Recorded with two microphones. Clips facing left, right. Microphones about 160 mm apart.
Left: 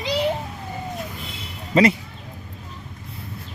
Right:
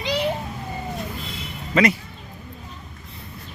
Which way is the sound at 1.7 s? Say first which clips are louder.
Left 2 dB; 30° left (ahead or behind).